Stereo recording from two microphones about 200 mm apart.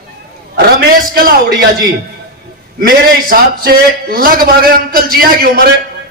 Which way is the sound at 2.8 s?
50° right (ahead or behind).